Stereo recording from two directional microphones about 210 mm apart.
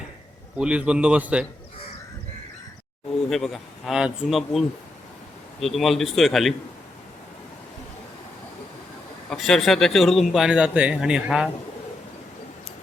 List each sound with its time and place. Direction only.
0.5 s speech: 5° right (ahead or behind)
3.2 s speech: centre (ahead or behind)
9.3 s speech: centre (ahead or behind)